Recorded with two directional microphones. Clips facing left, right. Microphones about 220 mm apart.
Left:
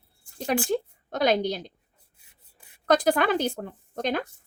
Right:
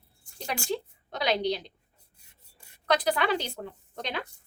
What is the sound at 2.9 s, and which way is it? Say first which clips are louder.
A woman's voice: left 4 dB; 50° left (ahead or behind).